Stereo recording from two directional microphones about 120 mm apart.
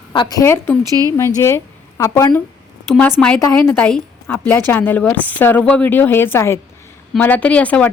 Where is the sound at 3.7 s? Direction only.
5° left (ahead or behind).